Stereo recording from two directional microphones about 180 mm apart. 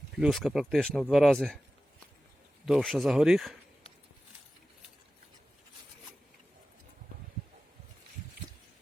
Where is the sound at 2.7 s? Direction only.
Centre (ahead or behind).